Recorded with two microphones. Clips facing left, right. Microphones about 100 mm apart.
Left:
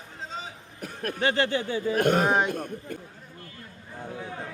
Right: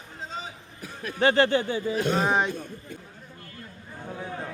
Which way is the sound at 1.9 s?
55° left (ahead or behind).